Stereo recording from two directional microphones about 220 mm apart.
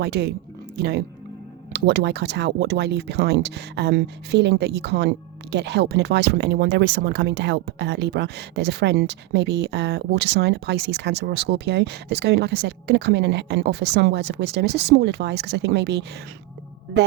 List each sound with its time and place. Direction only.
0.0 s speech: 50° right (ahead or behind)